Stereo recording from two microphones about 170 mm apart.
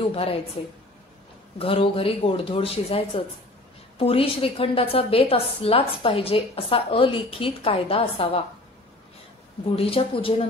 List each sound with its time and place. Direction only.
0.1 s a woman's voice: 35° left (ahead or behind)
1.6 s a woman's voice: 35° left (ahead or behind)
9.7 s a woman's voice: 35° left (ahead or behind)